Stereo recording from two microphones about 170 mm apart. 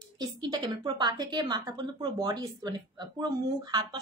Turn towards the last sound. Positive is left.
turn(degrees=-25)  # may be behind; listen again after turning